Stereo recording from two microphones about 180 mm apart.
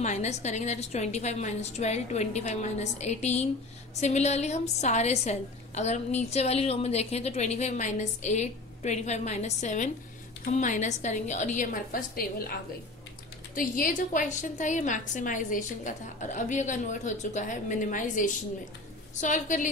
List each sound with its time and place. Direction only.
0.0 s a woman's voice: 40° left (ahead or behind)
13.6 s a woman's voice: 45° left (ahead or behind)